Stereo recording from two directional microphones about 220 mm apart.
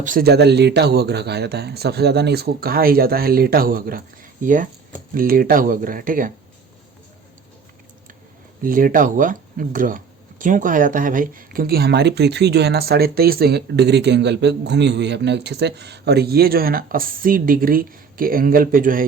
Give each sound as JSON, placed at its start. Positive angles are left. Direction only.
{"t": 0.0, "sound": "speech", "side_deg": -40}
{"t": 8.6, "sound": "speech", "side_deg": -40}